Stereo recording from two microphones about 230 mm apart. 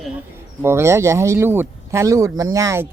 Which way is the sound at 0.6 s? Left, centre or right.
Centre.